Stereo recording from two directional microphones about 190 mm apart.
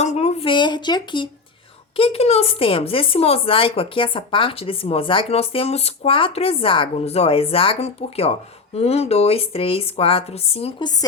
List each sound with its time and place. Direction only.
0.0 s speech: 35° left (ahead or behind)